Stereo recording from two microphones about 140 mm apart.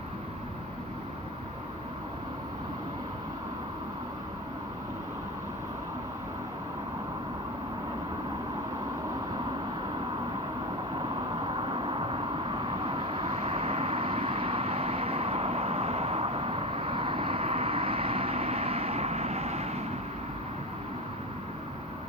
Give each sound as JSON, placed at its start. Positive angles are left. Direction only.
{"t": 11.7, "sound": "vehicle", "side_deg": -40}